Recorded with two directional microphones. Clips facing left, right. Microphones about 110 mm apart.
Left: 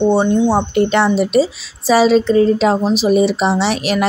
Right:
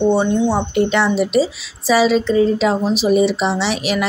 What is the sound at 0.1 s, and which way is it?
Speech, 30° left (ahead or behind).